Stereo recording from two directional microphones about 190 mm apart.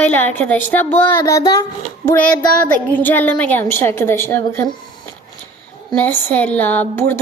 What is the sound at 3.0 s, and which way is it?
A woman's voice, 10° left (ahead or behind).